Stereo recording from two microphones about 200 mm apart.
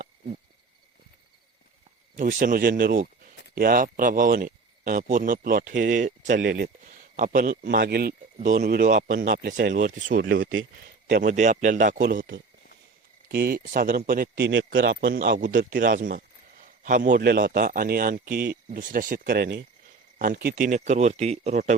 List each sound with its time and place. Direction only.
2.1 s speech: 40° right (ahead or behind)
9.7 s speech: 40° right (ahead or behind)
10.4 s speech: 70° right (ahead or behind)
11.0 s speech: 40° right (ahead or behind)
12.0 s speech: 55° right (ahead or behind)
15.4 s speech: 40° right (ahead or behind)